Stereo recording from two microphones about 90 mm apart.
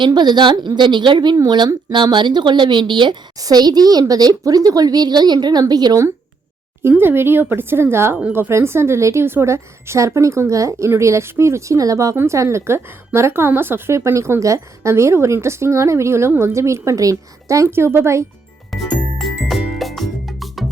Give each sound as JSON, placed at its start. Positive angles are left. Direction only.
{"t": 0.0, "sound": "speech", "side_deg": -55}
{"t": 3.3, "sound": "speech", "side_deg": -45}
{"t": 6.8, "sound": "a woman's voice", "side_deg": -25}
{"t": 18.7, "sound": "music", "side_deg": 0}